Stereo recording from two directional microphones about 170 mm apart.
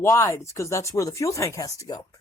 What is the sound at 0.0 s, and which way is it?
Speech, 15° left (ahead or behind).